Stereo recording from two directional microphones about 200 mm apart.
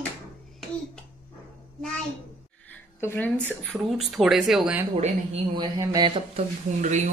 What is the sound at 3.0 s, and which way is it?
Speech, 10° left (ahead or behind).